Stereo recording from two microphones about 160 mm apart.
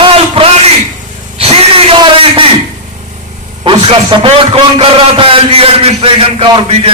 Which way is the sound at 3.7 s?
30° right (ahead or behind).